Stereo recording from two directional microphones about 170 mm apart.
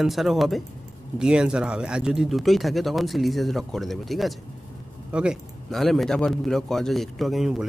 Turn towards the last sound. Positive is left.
turn(degrees=0)  # may be behind; listen again after turning